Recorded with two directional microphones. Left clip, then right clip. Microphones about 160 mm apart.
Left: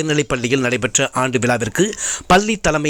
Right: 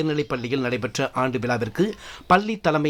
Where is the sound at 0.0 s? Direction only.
20° left (ahead or behind).